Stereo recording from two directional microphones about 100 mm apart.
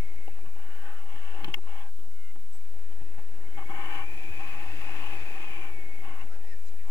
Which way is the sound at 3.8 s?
35° left (ahead or behind).